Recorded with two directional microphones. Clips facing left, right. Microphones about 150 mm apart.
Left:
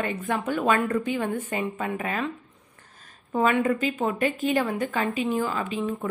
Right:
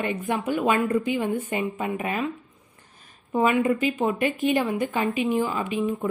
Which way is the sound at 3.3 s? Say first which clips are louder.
Right 1 dB; 15° right (ahead or behind).